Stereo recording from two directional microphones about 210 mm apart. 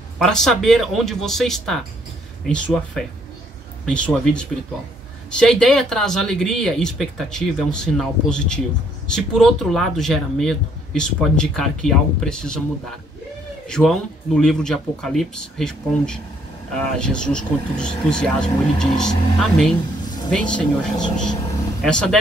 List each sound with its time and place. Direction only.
0.2 s speech: centre (ahead or behind)
13.7 s speech: 5° left (ahead or behind)
21.8 s speech: 5° left (ahead or behind)